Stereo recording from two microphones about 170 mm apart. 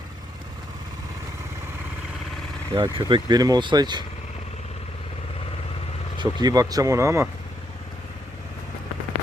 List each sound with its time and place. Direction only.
2.7 s speech: 25° right (ahead or behind)
6.1 s speech: 20° right (ahead or behind)